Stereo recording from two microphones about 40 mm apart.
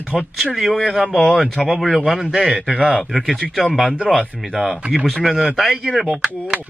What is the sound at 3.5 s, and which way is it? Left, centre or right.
Speech, centre.